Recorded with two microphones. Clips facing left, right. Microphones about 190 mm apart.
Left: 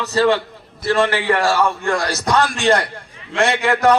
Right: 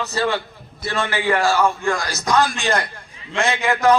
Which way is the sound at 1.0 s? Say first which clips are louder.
Left 1 dB; 80° left.